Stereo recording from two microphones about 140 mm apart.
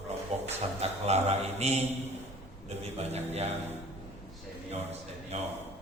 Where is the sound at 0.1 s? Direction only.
50° right (ahead or behind).